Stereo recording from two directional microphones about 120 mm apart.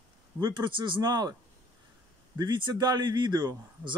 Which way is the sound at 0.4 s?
35° right (ahead or behind).